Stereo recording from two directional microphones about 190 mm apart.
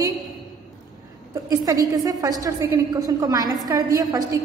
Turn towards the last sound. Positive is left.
turn(degrees=-20)  # may be behind; listen again after turning